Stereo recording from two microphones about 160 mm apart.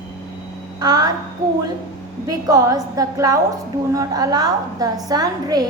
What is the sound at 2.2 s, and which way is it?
A woman's voice, 25° right (ahead or behind).